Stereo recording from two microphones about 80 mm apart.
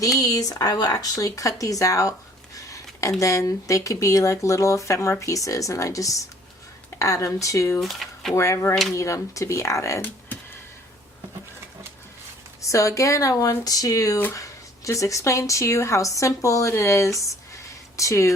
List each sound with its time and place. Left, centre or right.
0.2 s speech: left
7.8 s speech: centre
8.4 s speech: left
12.6 s speech: left